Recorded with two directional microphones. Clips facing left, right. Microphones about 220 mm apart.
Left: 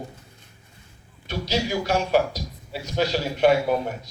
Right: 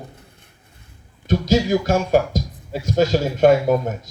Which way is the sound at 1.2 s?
45° right (ahead or behind).